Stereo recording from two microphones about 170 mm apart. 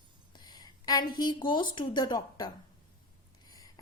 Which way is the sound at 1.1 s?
25° left (ahead or behind).